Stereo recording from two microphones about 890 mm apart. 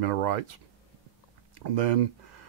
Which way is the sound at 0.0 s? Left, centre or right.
Right.